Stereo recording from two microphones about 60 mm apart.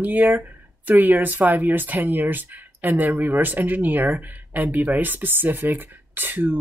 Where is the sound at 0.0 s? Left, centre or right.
Right.